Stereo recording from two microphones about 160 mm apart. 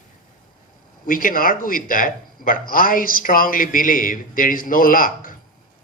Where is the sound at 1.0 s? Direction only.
60° left (ahead or behind).